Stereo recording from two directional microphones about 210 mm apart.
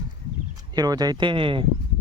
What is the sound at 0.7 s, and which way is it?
Speech, 20° right (ahead or behind).